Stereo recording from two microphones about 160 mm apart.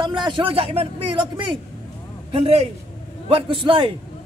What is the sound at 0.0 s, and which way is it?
A man's voice, 30° right (ahead or behind).